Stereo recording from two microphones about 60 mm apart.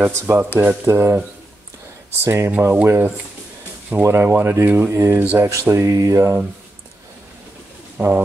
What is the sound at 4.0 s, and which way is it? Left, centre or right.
Speech, right.